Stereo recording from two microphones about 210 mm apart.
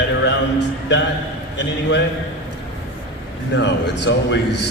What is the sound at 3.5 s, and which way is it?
Speech, 55° left (ahead or behind).